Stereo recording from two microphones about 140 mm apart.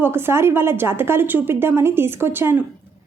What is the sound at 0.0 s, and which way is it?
A woman's voice, 15° right (ahead or behind).